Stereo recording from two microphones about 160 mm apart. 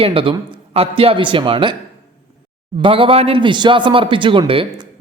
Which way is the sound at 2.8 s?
35° right (ahead or behind).